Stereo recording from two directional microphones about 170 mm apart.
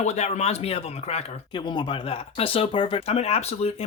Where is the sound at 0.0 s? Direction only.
40° left (ahead or behind).